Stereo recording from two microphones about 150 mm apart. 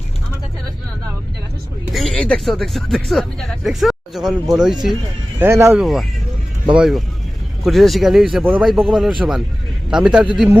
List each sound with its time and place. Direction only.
1.9 s speech: centre (ahead or behind)
5.4 s speech: 20° right (ahead or behind)
5.7 s speech: centre (ahead or behind)